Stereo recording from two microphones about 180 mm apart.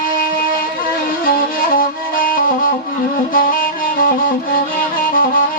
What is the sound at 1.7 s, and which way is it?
Music, 50° left (ahead or behind).